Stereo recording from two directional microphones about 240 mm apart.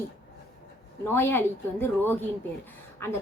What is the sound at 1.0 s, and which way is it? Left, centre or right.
A woman's voice, centre.